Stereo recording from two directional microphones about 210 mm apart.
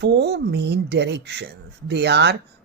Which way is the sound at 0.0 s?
55° right (ahead or behind).